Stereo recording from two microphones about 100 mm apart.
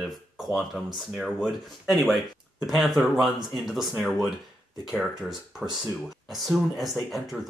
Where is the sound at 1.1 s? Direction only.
5° right (ahead or behind).